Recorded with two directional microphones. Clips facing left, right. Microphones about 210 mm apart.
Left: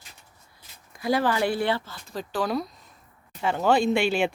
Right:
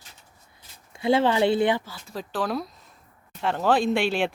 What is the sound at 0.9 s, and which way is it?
Speech, 25° right (ahead or behind).